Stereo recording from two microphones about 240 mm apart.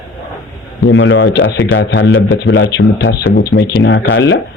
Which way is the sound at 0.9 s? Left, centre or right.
Left.